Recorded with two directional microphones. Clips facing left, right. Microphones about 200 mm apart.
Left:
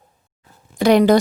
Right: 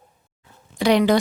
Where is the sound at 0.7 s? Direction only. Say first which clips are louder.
Left 4 dB; 45° left (ahead or behind).